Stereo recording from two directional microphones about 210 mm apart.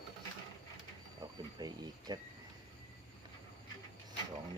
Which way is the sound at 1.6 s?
20° right (ahead or behind).